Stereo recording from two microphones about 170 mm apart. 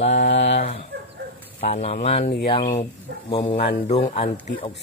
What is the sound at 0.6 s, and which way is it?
Chicken, 35° left (ahead or behind).